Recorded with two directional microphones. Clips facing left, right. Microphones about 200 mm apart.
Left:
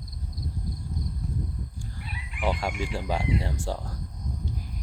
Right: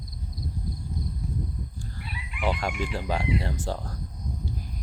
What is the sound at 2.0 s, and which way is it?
Chicken, 45° left (ahead or behind).